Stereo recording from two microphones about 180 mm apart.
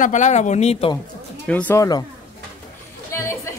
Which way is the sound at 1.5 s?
10° left (ahead or behind).